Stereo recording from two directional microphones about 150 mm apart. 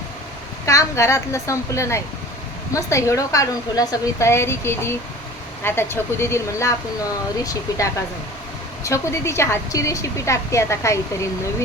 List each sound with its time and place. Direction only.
0.6 s a woman's voice: 20° left (ahead or behind)